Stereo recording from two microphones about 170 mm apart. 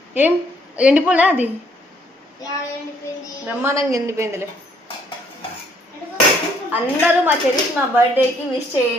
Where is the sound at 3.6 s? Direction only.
20° right (ahead or behind).